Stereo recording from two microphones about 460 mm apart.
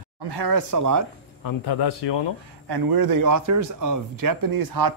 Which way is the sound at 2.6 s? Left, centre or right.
Right.